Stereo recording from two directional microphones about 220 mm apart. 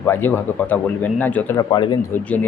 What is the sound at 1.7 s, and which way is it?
Speech, 20° left (ahead or behind).